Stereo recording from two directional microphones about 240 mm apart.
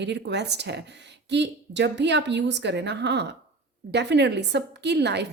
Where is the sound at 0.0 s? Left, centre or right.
Right.